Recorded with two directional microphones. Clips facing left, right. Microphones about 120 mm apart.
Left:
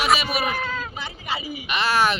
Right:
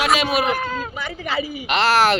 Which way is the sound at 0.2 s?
90° right.